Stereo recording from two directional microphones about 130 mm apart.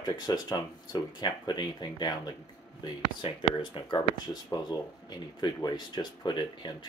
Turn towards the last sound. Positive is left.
turn(degrees=35)  # may be behind; listen again after turning